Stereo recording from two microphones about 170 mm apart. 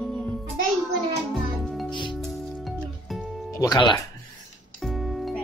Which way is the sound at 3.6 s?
25° left (ahead or behind).